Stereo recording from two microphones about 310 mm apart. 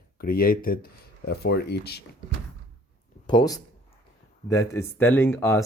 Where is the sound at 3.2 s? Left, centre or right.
Centre.